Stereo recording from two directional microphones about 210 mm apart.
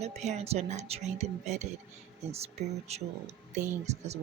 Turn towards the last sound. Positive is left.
turn(degrees=-30)  # may be behind; listen again after turning